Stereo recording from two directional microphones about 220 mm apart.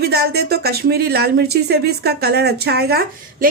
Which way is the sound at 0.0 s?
45° right (ahead or behind).